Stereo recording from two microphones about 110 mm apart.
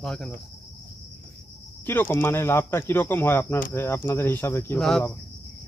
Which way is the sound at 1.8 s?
20° left (ahead or behind).